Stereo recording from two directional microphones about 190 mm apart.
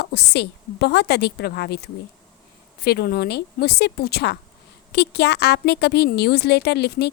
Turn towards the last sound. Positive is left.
turn(degrees=60)  # may be behind; listen again after turning